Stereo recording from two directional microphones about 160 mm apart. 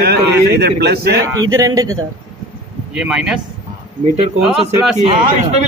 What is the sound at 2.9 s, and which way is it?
Speech, 5° right (ahead or behind).